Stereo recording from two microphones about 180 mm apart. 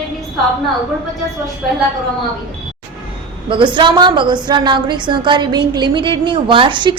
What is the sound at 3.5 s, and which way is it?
A woman's voice, 25° right (ahead or behind).